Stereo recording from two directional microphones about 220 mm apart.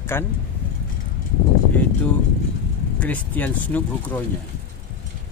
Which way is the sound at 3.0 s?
5° left (ahead or behind).